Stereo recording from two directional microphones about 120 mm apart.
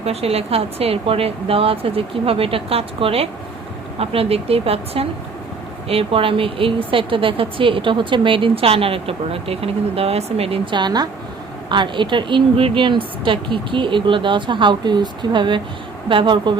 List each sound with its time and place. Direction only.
0.0 s a woman's voice: 55° right (ahead or behind)